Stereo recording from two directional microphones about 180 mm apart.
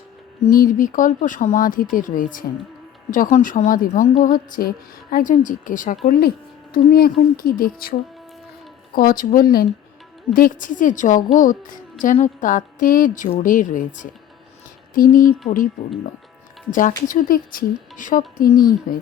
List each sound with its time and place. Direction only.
0.5 s speech: 50° left (ahead or behind)
6.1 s speech: 60° left (ahead or behind)
9.0 s a woman's voice: 55° left (ahead or behind)
16.7 s speech: 45° left (ahead or behind)